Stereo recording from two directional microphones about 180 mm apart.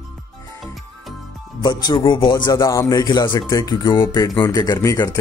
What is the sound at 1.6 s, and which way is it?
A man's voice, 25° left (ahead or behind).